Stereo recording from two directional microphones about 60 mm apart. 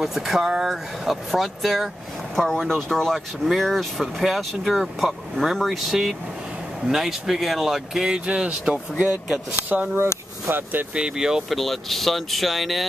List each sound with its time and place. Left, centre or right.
0.0 s speech: centre; by 10.9 s right
11.0 s speech: centre
11.4 s speech: centre